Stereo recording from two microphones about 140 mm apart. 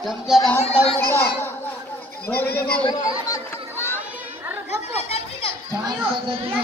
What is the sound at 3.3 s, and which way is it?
Children playing, 20° left (ahead or behind).